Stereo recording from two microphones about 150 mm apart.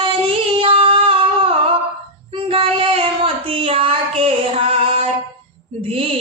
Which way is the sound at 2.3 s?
35° right (ahead or behind).